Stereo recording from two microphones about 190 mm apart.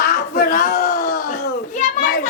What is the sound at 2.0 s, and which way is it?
Children playing, 45° left (ahead or behind).